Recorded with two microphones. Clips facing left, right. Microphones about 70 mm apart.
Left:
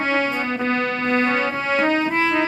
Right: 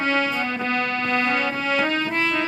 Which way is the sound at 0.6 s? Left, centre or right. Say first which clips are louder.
Left 4 dB; left.